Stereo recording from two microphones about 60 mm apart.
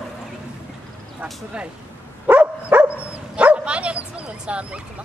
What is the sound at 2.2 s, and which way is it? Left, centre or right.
Dog, right.